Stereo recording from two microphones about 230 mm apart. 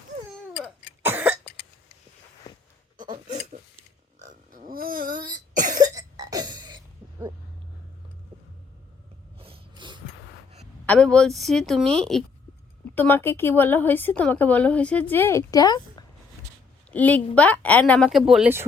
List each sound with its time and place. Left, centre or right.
1.0 s cough: centre
3.0 s hiccup: right
4.5 s cough: right
5.7 s cough: centre
9.4 s a sound: right
10.8 s a woman's voice: centre
16.9 s a woman's voice: centre
18.3 s a woman's voice: centre